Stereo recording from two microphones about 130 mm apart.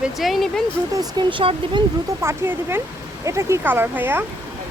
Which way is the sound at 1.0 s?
35° right (ahead or behind).